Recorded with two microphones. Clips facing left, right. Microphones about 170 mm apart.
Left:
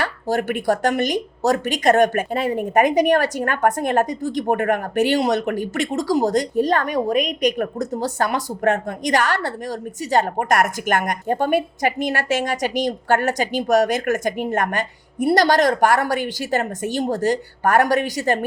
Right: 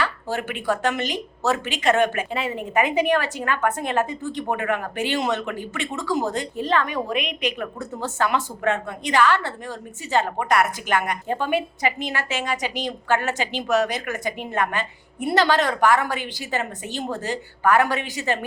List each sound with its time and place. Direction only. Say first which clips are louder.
0.0 s a woman's voice: left 4 dB; 40° left (ahead or behind)